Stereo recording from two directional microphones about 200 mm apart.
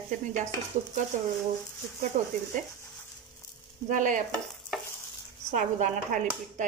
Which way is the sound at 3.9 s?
40° right (ahead or behind).